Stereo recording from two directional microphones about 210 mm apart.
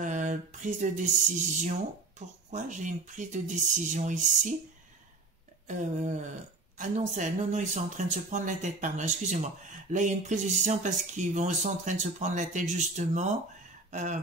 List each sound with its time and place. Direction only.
0.0 s music: 35° right (ahead or behind)
5.7 s speech: 35° right (ahead or behind)